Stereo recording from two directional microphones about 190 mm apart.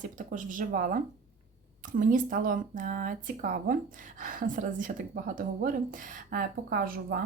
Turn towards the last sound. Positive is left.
turn(degrees=-50)  # may be behind; listen again after turning